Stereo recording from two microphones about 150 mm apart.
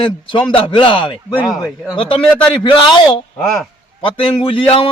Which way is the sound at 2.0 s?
35° left (ahead or behind).